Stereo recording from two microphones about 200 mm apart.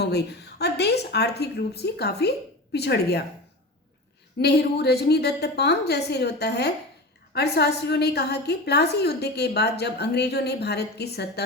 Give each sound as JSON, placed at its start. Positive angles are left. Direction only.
{"t": 0.0, "sound": "a woman's voice", "side_deg": 55}
{"t": 4.4, "sound": "a woman's voice", "side_deg": 55}